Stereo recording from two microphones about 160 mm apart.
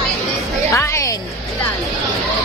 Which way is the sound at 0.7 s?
20° left (ahead or behind).